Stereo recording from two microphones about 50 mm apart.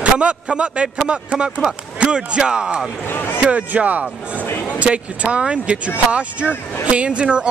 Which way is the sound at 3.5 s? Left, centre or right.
Right.